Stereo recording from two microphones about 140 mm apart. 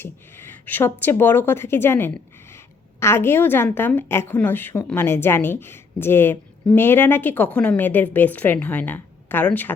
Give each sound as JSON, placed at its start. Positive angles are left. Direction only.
{"t": 0.0, "sound": "a woman's voice", "side_deg": 15}